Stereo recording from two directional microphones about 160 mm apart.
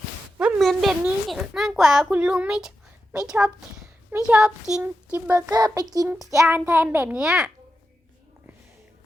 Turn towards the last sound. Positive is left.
turn(degrees=0)  # may be behind; listen again after turning